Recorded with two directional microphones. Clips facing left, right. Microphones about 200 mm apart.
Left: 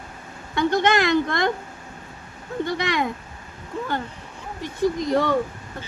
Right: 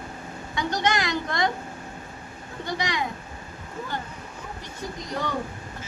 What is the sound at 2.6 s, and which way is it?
Speech, 55° left (ahead or behind).